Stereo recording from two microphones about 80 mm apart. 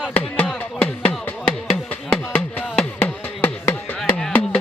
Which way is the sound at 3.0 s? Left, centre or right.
Left.